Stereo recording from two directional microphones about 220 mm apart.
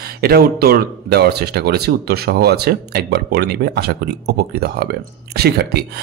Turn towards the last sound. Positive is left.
turn(degrees=-45)  # may be behind; listen again after turning